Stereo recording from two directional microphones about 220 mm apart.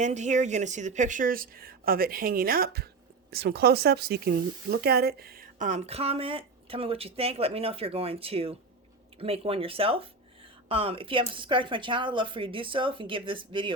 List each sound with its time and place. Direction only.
0.0 s a woman's voice: 30° right (ahead or behind)